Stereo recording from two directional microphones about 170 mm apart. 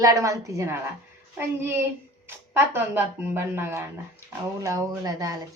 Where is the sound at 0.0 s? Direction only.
20° right (ahead or behind).